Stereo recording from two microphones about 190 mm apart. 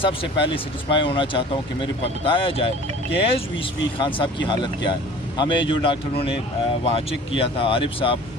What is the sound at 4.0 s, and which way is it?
Speech, 25° left (ahead or behind).